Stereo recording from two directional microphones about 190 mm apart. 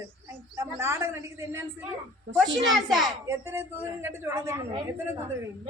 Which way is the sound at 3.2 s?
15° right (ahead or behind).